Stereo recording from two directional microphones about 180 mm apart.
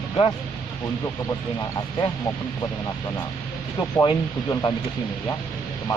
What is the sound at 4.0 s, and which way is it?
Speech, 20° left (ahead or behind).